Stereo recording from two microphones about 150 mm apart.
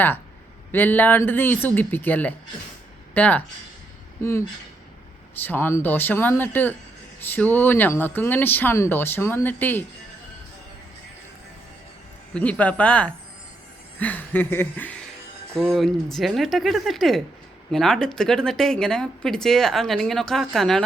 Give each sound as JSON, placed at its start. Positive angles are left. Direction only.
{"t": 0.7, "sound": "speech", "side_deg": 15}
{"t": 12.3, "sound": "speech", "side_deg": 10}
{"t": 15.7, "sound": "speech", "side_deg": 0}